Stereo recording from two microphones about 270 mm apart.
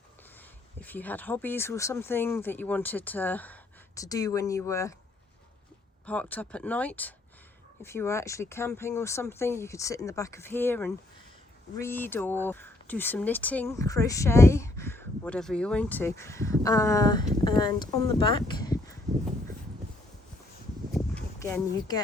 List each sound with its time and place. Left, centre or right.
0.8 s speech: centre
6.1 s speech: centre
20.9 s a sound: centre